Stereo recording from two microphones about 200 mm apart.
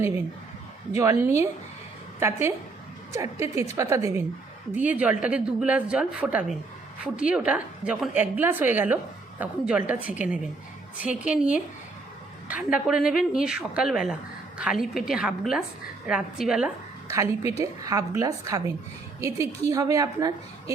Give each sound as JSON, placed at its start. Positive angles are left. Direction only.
{"t": 0.9, "sound": "a woman's voice", "side_deg": -15}
{"t": 3.1, "sound": "a woman's voice", "side_deg": -15}
{"t": 12.7, "sound": "a woman's voice", "side_deg": -5}
{"t": 17.1, "sound": "a woman's voice", "side_deg": -15}